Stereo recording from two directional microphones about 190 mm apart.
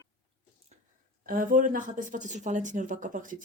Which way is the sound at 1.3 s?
45° right (ahead or behind).